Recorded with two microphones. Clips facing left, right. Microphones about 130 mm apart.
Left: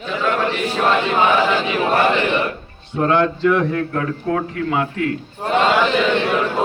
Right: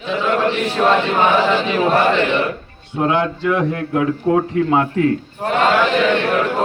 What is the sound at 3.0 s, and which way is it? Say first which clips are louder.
A man's voice: left 1 dB; 10° right (ahead or behind).